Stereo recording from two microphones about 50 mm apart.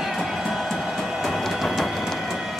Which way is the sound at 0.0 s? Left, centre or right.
Centre.